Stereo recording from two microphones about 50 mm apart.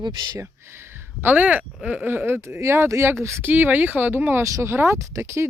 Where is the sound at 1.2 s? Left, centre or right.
Right.